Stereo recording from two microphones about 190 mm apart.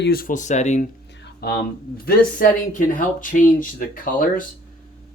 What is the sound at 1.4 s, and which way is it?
Speech, 55° left (ahead or behind).